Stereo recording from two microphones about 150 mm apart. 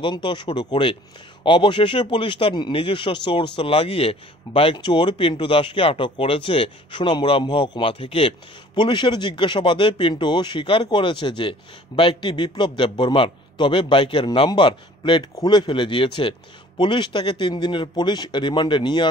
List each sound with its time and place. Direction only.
0.0 s speech: 30° left (ahead or behind)